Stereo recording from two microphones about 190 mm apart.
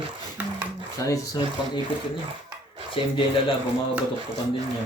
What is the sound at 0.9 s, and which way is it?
Speech, 20° left (ahead or behind).